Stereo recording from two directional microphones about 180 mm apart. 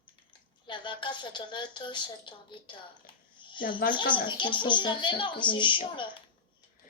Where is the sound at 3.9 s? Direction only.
25° left (ahead or behind).